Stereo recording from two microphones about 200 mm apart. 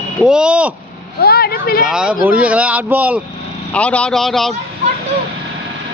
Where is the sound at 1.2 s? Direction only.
50° left (ahead or behind).